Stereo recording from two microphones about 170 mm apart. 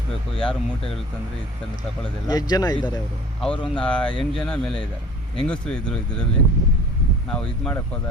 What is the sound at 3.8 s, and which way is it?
Speech, 5° left (ahead or behind).